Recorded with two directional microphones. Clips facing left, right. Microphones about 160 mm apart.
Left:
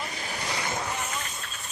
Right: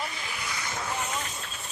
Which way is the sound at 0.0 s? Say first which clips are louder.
Left 1 dB; 40° left (ahead or behind).